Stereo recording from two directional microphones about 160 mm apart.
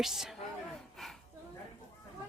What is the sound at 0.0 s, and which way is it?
Speech, centre (ahead or behind).